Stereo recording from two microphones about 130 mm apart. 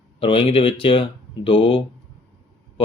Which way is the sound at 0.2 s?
45° left (ahead or behind).